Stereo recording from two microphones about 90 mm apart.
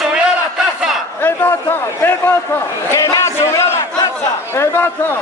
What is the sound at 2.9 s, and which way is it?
Crowd, 35° left (ahead or behind).